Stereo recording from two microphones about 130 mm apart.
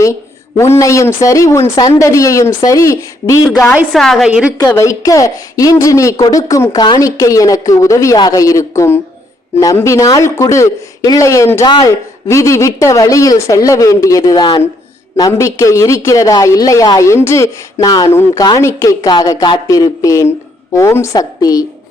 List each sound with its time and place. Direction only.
0.0 s speech: 25° left (ahead or behind)
3.9 s a woman's voice: centre (ahead or behind)
4.3 s a woman's voice: 10° right (ahead or behind)
4.6 s speech: 25° left (ahead or behind)